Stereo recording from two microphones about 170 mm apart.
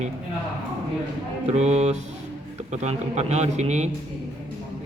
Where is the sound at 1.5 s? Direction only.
40° right (ahead or behind).